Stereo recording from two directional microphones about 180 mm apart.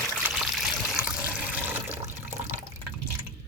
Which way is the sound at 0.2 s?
5° right (ahead or behind).